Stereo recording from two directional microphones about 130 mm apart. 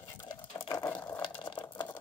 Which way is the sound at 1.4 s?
35° left (ahead or behind).